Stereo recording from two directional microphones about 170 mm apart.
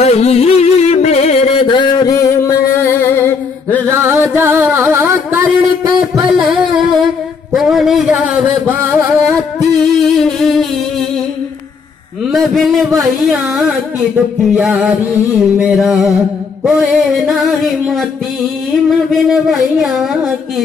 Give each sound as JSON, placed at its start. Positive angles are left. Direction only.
{"t": 0.0, "sound": "music", "side_deg": 40}
{"t": 3.9, "sound": "music", "side_deg": -15}
{"t": 6.1, "sound": "music", "side_deg": 0}
{"t": 7.5, "sound": "a sound", "side_deg": 0}
{"t": 9.9, "sound": "music", "side_deg": 0}
{"t": 12.3, "sound": "music", "side_deg": 0}